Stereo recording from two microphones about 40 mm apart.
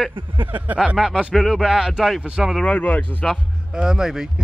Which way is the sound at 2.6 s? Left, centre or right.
Left.